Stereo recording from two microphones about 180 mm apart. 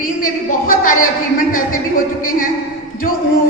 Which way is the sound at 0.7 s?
50° left (ahead or behind).